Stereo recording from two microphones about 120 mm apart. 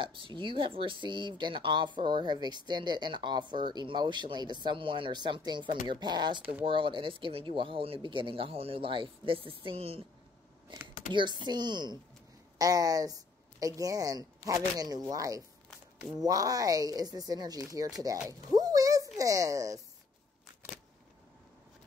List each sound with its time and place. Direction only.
0.0 s speech: 45° right (ahead or behind)
10.7 s a sound: 40° right (ahead or behind)
11.1 s speech: 40° right (ahead or behind)